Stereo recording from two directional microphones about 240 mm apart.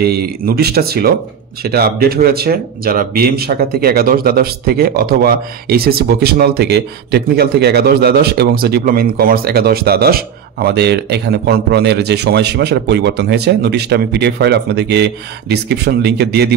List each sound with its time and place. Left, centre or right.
0.0 s speech: right